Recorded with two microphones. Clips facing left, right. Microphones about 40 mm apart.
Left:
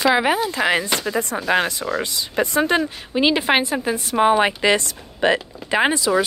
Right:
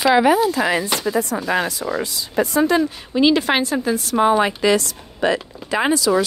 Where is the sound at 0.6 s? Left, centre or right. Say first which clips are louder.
Even; centre.